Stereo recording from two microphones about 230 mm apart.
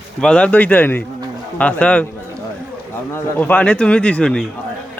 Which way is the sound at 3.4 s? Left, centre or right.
Centre.